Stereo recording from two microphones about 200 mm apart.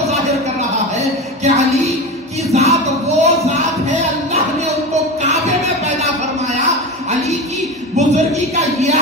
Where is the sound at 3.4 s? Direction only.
35° right (ahead or behind).